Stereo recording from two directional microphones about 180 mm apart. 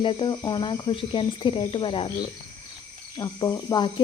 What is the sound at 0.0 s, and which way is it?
Speech, 25° left (ahead or behind).